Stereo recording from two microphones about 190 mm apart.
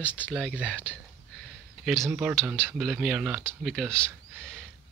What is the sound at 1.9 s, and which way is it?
Speech, 5° right (ahead or behind).